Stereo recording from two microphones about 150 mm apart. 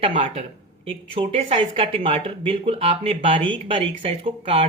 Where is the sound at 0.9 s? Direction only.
40° right (ahead or behind).